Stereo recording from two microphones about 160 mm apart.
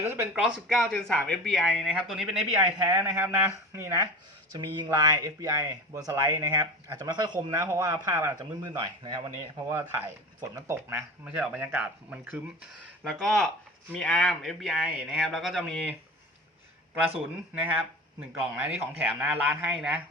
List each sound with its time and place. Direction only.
0.0 s speech: 15° right (ahead or behind)
17.5 s speech: 10° right (ahead or behind)